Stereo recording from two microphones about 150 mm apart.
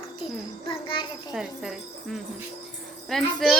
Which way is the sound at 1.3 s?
Centre (ahead or behind).